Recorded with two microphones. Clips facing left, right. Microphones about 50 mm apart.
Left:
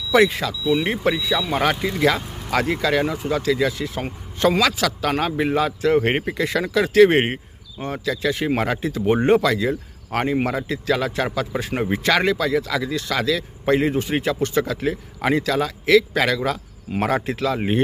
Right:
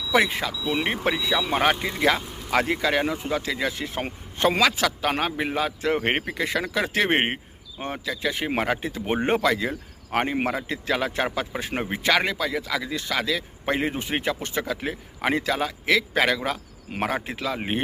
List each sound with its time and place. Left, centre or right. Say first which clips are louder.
0.1 s a man's voice: left 5 dB; right
5.4 s a man's voice: left 5 dB; centre
5.8 s a man's voice: left 5 dB; right
8.0 s a man's voice: left 6 dB; centre